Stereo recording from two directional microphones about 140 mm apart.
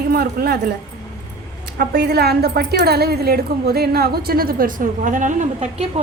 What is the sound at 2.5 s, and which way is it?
A woman's voice, 90° right.